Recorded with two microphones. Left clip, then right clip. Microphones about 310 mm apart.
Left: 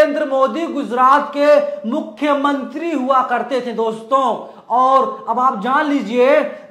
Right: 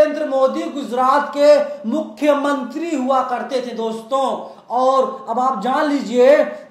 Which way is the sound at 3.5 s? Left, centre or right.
Left.